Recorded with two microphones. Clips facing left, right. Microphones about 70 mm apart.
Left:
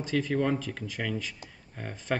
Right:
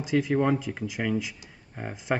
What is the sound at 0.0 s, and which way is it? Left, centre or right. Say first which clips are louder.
Speech: right 4 dB; centre.